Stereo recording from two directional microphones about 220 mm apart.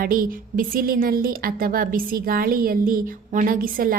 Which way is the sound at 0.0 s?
40° right (ahead or behind).